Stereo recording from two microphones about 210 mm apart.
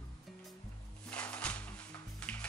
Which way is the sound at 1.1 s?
5° left (ahead or behind).